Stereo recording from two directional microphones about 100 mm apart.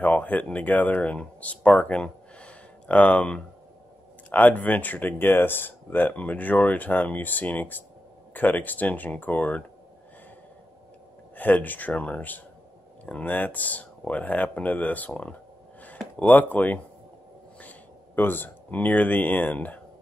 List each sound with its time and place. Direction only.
0.0 s speech: 15° left (ahead or behind)
11.3 s speech: 20° left (ahead or behind)